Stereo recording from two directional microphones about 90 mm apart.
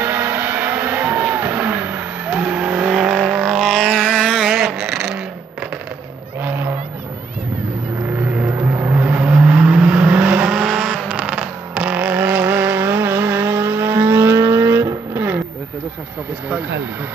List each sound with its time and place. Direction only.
0.0 s vehicle: 25° right (ahead or behind); by 5.2 s 5° right (ahead or behind)
8.9 s vehicle: 20° right (ahead or behind)
10.6 s vehicle: centre (ahead or behind)
11.1 s vehicle: 10° right (ahead or behind)